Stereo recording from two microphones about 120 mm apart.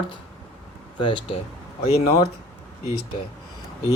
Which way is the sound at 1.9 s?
60° left (ahead or behind).